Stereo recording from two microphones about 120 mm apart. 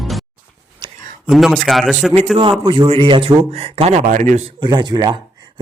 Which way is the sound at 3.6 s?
60° right (ahead or behind).